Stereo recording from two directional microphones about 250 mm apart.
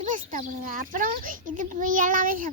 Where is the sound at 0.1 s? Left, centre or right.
Right.